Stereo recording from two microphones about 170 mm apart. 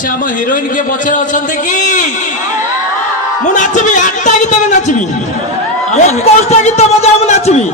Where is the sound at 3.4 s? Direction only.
45° left (ahead or behind).